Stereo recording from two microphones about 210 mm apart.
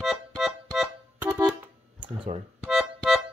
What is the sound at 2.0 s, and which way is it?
Clicking, 25° right (ahead or behind).